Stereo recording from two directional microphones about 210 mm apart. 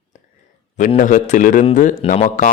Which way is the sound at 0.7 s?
35° left (ahead or behind).